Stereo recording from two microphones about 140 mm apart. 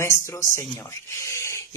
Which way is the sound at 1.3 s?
20° left (ahead or behind).